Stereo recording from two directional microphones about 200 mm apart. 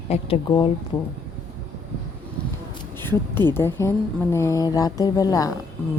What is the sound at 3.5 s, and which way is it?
Speech, 10° left (ahead or behind).